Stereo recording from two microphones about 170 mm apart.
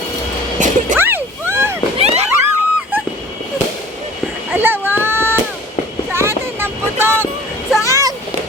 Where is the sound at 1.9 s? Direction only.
40° right (ahead or behind).